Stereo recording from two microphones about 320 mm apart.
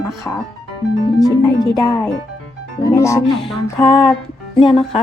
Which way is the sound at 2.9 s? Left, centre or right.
Centre.